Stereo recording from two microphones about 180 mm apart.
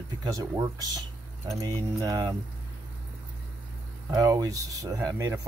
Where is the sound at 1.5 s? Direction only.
20° right (ahead or behind).